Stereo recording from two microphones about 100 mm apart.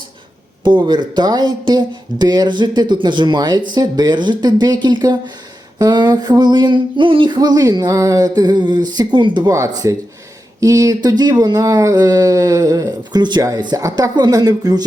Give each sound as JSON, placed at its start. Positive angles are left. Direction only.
{"t": 0.6, "sound": "speech", "side_deg": -50}
{"t": 7.3, "sound": "speech", "side_deg": -40}
{"t": 9.5, "sound": "speech", "side_deg": -35}